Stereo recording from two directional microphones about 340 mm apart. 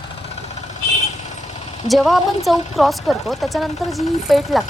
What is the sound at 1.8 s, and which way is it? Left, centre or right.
Speech, centre.